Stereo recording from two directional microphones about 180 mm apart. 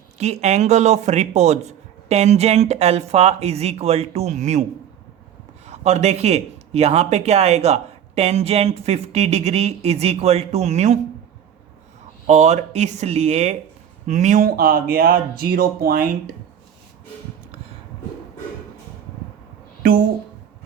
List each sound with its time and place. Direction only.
0.2 s speech: 40° right (ahead or behind)
5.6 s speech: 35° right (ahead or behind)
12.3 s speech: 40° right (ahead or behind)